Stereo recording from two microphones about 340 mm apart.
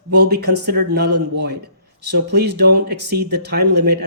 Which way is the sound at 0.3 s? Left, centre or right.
Right.